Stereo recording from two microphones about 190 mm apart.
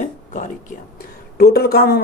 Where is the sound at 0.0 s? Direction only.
40° left (ahead or behind).